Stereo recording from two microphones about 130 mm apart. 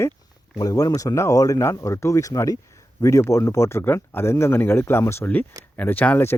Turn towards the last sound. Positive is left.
turn(degrees=15)  # may be behind; listen again after turning